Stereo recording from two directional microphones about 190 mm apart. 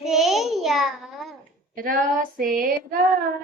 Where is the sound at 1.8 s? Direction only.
45° right (ahead or behind).